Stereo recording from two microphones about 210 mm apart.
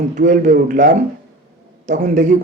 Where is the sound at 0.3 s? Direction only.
35° right (ahead or behind).